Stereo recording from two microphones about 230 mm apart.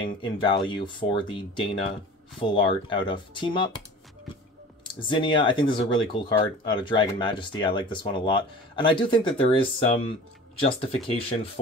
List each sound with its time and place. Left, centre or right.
0.0 s speech: left
4.8 s speech: left